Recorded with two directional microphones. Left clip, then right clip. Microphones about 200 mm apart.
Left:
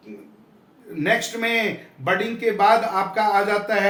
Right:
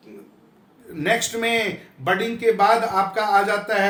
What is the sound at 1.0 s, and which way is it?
A man's voice, 25° right (ahead or behind).